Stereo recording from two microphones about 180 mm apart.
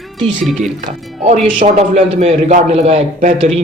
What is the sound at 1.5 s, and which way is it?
A man's voice, 35° right (ahead or behind).